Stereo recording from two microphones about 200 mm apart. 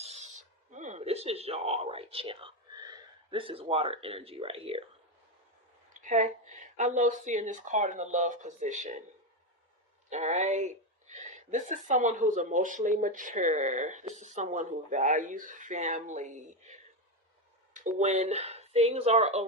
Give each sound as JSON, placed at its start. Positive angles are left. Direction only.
{"t": 0.0, "sound": "speech", "side_deg": -35}
{"t": 5.9, "sound": "speech", "side_deg": -40}
{"t": 10.1, "sound": "speech", "side_deg": -35}
{"t": 17.8, "sound": "speech", "side_deg": -35}